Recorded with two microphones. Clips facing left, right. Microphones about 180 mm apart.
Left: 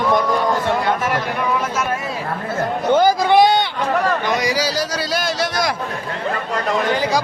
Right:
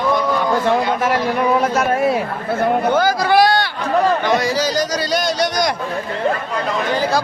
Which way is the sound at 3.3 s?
20° left (ahead or behind).